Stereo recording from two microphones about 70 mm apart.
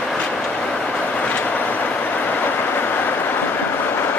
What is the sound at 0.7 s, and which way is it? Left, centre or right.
Vehicle, centre.